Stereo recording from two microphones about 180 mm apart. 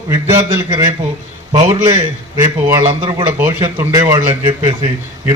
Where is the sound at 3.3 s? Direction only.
15° right (ahead or behind).